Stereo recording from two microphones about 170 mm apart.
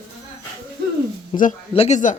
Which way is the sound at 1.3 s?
35° left (ahead or behind).